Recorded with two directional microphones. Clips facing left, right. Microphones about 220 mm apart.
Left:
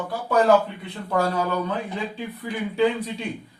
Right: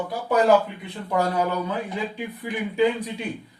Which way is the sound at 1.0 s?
15° right (ahead or behind).